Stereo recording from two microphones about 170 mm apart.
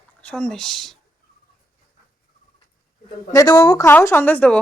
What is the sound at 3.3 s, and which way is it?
Speech, 20° left (ahead or behind).